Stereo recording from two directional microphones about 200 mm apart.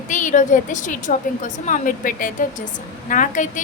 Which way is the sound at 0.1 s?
40° left (ahead or behind).